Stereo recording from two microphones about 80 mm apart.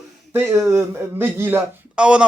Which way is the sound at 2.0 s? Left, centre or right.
Centre.